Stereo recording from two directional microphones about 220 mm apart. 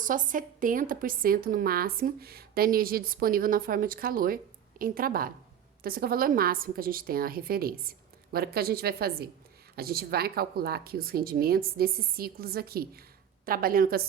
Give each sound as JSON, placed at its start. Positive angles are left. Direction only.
{"t": 0.0, "sound": "a woman's voice", "side_deg": -35}